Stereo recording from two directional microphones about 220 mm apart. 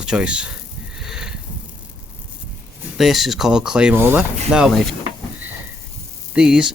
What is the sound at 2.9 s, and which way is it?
Speech, centre (ahead or behind).